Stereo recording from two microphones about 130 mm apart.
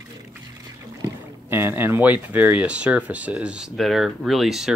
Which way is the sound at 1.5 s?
15° right (ahead or behind).